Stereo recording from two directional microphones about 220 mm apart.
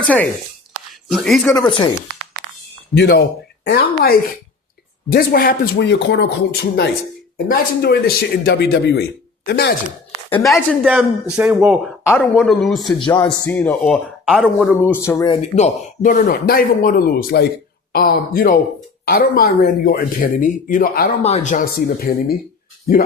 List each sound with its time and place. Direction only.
0.0 s speech: 5° left (ahead or behind)
1.5 s speech: 20° left (ahead or behind)
2.9 s speech: 50° left (ahead or behind)
10.4 s speech: centre (ahead or behind)
15.0 s speech: 15° left (ahead or behind)
15.4 s speech: 30° left (ahead or behind)
21.2 s speech: 30° left (ahead or behind)